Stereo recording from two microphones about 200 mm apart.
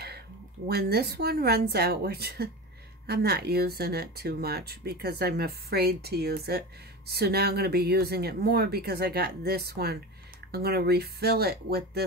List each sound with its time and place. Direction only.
0.7 s speech: 50° right (ahead or behind)